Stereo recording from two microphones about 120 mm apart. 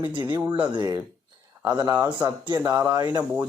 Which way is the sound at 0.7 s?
35° right (ahead or behind).